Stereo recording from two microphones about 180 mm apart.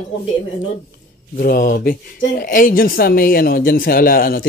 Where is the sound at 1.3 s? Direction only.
50° left (ahead or behind).